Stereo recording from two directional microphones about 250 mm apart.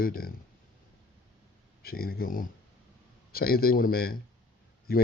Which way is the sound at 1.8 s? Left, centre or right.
Left.